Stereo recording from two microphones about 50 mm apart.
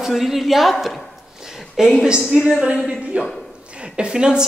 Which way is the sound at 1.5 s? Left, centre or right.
Centre.